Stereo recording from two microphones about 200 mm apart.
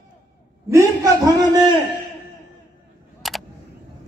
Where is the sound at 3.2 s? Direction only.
Centre (ahead or behind).